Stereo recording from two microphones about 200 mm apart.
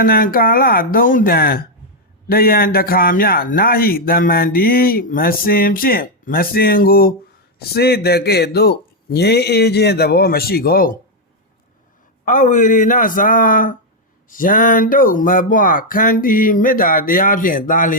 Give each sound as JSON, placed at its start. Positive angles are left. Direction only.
{"t": 0.0, "sound": "a man's voice", "side_deg": 45}
{"t": 12.2, "sound": "a man's voice", "side_deg": 40}